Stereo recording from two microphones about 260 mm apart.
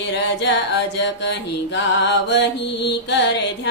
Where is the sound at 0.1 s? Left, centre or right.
Left.